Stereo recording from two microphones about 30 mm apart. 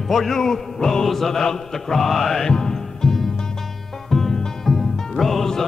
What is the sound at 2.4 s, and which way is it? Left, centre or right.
Music, centre.